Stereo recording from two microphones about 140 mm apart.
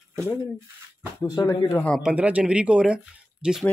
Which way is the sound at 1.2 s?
25° left (ahead or behind).